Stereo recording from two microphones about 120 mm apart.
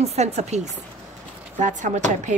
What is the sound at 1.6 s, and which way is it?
Speech, 90° right.